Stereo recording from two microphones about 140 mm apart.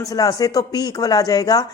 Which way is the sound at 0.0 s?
25° left (ahead or behind).